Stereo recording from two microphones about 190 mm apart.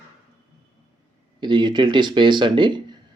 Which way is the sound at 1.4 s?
25° right (ahead or behind).